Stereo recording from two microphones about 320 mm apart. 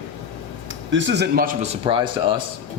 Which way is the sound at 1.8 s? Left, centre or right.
Centre.